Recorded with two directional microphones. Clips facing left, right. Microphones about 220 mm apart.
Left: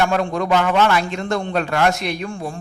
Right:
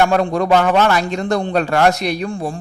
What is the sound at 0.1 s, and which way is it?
A man's voice, 35° right (ahead or behind).